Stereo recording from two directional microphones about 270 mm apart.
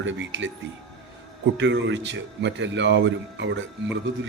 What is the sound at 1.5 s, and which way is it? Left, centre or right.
Speech, right.